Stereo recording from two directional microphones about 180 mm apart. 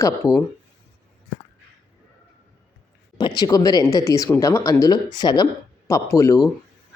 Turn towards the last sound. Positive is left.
turn(degrees=15)  # may be behind; listen again after turning